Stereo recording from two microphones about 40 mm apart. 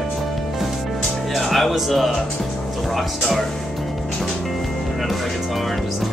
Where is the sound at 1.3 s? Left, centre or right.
Centre.